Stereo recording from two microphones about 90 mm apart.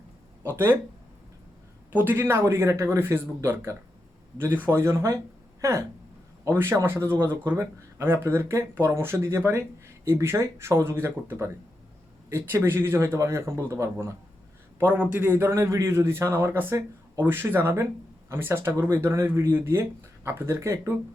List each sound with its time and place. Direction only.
0.5 s speech: 25° right (ahead or behind)
1.9 s a man's voice: 20° right (ahead or behind)
14.8 s speech: 15° right (ahead or behind); by 20.9 s 30° right (ahead or behind)